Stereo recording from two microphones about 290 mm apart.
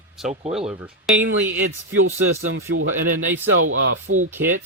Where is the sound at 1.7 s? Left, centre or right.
Right.